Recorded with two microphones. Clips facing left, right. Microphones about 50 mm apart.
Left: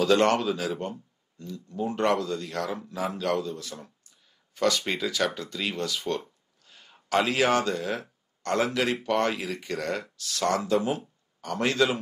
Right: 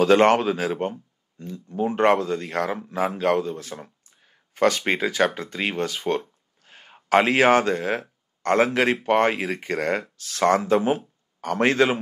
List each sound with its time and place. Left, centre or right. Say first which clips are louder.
0.0 s speech: right 5 dB; right